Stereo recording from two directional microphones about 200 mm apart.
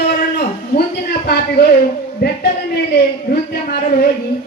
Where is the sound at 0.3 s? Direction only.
50° left (ahead or behind).